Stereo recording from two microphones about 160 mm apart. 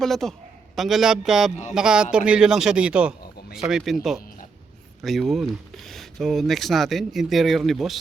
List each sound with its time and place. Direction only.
0.0 s speech: centre (ahead or behind)